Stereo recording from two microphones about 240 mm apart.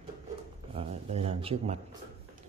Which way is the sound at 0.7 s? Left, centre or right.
Right.